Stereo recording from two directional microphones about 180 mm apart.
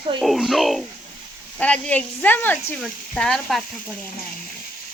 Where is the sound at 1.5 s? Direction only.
5° left (ahead or behind).